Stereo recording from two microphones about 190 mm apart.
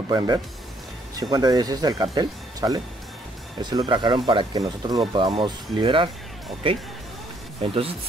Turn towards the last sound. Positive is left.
turn(degrees=-30)  # may be behind; listen again after turning